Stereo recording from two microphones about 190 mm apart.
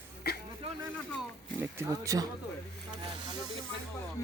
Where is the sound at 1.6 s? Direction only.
15° right (ahead or behind).